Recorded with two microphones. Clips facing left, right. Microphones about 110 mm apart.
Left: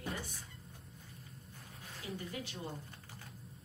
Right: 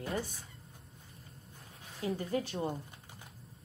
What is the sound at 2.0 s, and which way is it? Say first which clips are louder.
Speech: right 10 dB; 35° right (ahead or behind).